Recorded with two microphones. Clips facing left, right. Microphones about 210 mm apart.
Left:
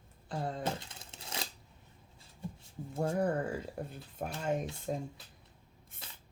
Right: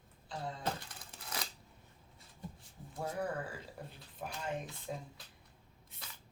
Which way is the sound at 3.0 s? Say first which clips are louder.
Left 7 dB; 45° left (ahead or behind).